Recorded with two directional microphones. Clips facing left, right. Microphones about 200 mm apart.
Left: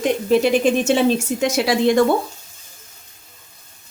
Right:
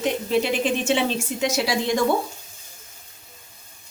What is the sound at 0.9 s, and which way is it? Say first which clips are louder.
Speech: left 6 dB; 45° left (ahead or behind).